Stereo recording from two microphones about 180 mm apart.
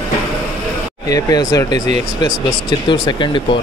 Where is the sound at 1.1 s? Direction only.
20° left (ahead or behind).